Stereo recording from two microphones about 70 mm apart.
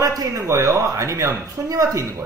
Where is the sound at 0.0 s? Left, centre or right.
Right.